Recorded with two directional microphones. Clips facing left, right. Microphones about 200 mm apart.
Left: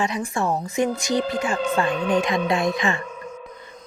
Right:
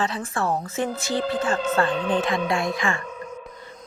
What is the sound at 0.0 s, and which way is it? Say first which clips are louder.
A woman's voice: left 2 dB; 15° left (ahead or behind).